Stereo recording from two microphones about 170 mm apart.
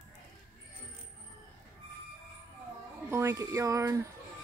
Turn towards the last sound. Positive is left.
turn(degrees=-15)  # may be behind; listen again after turning